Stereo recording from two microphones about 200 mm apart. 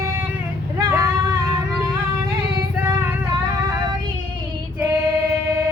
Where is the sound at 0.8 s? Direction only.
15° right (ahead or behind).